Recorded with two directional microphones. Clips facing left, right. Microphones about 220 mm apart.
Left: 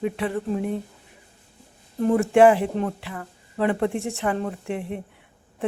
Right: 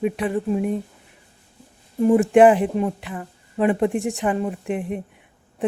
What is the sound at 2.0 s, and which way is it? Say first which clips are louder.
A woman's voice: right 3 dB; 15° right (ahead or behind).